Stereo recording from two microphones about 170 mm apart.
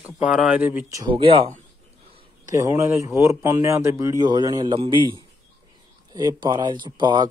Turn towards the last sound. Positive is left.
turn(degrees=-25)  # may be behind; listen again after turning